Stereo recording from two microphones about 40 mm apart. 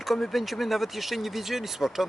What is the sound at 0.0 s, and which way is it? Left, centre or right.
Speech, centre.